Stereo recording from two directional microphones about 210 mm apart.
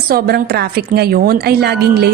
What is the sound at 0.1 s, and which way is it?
A woman's voice, 45° right (ahead or behind).